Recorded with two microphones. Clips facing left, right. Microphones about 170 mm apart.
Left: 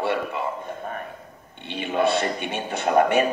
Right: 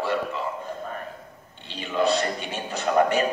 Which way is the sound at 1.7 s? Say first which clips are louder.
Left 1 dB; 60° left (ahead or behind).